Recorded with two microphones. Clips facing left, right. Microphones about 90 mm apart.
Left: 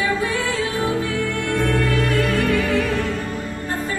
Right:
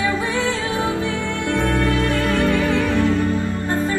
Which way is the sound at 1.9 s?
30° right (ahead or behind).